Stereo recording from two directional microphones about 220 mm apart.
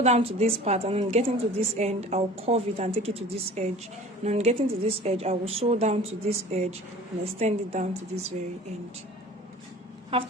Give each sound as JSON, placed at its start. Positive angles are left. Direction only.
{"t": 0.0, "sound": "a woman's voice", "side_deg": -25}
{"t": 10.1, "sound": "a woman's voice", "side_deg": -25}